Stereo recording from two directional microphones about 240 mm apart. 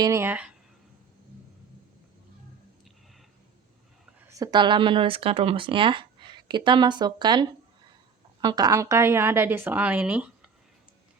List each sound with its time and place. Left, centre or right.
0.0 s a woman's voice: centre
4.3 s a woman's voice: centre